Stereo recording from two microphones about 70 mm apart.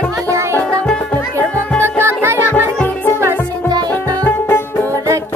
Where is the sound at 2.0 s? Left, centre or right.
Right.